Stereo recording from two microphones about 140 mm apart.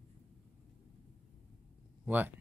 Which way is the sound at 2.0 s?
10° right (ahead or behind).